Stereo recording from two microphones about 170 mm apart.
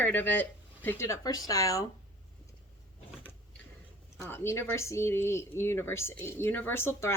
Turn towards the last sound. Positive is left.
turn(degrees=15)  # may be behind; listen again after turning